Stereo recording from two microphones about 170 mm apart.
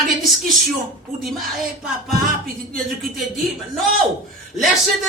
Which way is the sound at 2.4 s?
55° right (ahead or behind).